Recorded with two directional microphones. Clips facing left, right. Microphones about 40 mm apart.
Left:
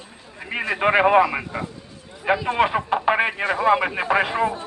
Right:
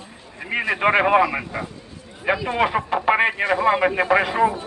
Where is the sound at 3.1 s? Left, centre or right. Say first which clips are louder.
Right 4 dB; centre.